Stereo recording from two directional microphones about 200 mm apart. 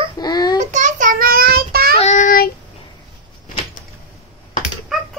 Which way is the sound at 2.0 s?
40° left (ahead or behind).